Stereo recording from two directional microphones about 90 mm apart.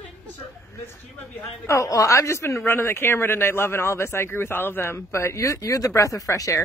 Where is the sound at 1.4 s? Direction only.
35° left (ahead or behind).